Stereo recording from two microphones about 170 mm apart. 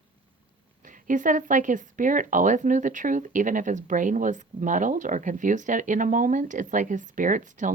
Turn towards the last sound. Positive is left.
turn(degrees=-50)  # may be behind; listen again after turning